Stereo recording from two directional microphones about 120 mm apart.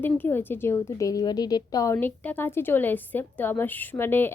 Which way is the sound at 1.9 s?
15° left (ahead or behind).